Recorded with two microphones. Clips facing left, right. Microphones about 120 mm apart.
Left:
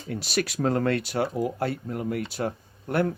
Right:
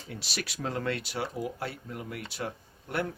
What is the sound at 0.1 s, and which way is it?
Speech, 45° left (ahead or behind).